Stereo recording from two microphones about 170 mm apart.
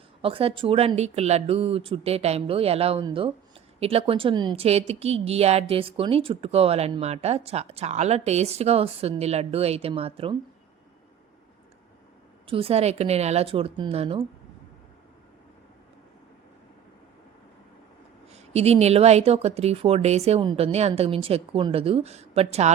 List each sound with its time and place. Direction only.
0.2 s a woman's voice: 35° right (ahead or behind)
12.5 s a woman's voice: 35° right (ahead or behind)
18.3 s a woman's voice: 40° right (ahead or behind)